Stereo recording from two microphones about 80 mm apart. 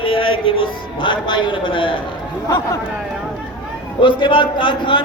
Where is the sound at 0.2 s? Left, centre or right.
Left.